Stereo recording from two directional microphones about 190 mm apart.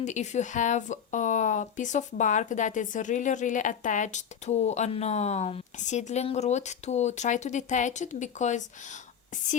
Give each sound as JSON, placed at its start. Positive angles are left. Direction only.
{"t": 0.0, "sound": "speech", "side_deg": 40}